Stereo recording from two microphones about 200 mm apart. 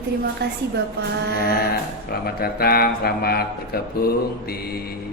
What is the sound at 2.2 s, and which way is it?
Speech, 50° left (ahead or behind).